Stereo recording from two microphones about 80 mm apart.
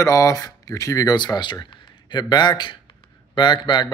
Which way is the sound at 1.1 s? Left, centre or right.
Left.